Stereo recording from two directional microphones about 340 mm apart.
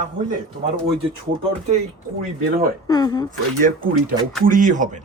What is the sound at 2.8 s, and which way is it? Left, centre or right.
Speech, centre.